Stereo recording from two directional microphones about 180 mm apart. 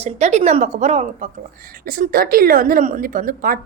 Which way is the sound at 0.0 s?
40° right (ahead or behind).